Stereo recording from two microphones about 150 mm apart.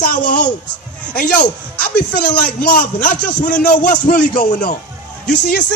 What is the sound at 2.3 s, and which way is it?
Speech, 65° left (ahead or behind).